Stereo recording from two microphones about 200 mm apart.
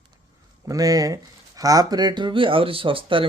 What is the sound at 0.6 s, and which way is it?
Speech, 15° right (ahead or behind).